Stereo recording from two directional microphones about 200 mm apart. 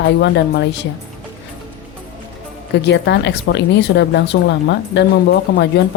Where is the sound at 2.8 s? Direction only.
60° left (ahead or behind).